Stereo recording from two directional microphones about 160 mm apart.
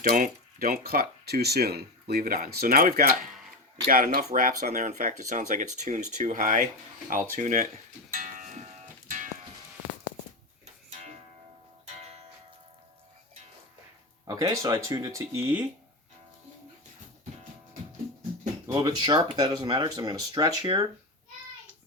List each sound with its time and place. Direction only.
0.0 s speech: 65° right (ahead or behind)
8.1 s music: 55° right (ahead or behind)
14.3 s speech: 25° right (ahead or behind)
18.7 s speech: 25° right (ahead or behind)